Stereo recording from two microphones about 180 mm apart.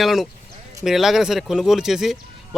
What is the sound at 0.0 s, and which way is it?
Speech, centre (ahead or behind).